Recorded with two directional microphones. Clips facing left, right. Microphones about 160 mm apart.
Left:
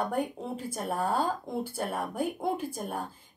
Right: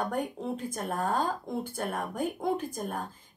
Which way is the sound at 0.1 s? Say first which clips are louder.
Even; 10° left (ahead or behind).